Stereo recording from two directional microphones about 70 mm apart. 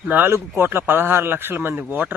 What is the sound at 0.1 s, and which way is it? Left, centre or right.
Speech, right.